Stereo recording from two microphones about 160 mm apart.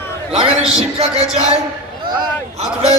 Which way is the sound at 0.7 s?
40° right (ahead or behind).